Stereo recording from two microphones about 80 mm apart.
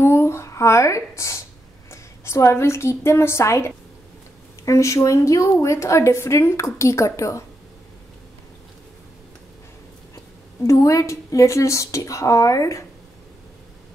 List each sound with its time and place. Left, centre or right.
0.0 s a sound: left
1.9 s a woman's voice: left
10.6 s speech: left